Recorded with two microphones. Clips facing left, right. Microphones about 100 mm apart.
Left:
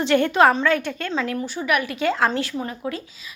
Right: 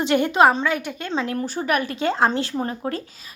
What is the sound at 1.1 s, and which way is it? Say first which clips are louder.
Speech: right 1 dB; 25° right (ahead or behind).